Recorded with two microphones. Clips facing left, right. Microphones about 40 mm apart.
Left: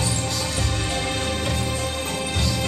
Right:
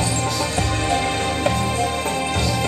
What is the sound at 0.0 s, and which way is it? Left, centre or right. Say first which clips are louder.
Music: right 4 dB; centre.